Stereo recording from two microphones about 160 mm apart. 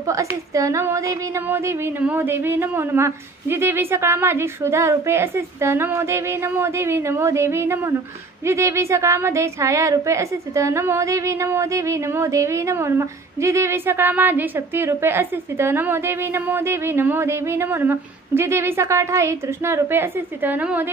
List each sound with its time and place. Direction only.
0.0 s a woman's voice: 20° right (ahead or behind)